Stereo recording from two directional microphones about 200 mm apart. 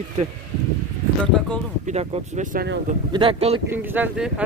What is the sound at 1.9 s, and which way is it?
Speech, 35° right (ahead or behind).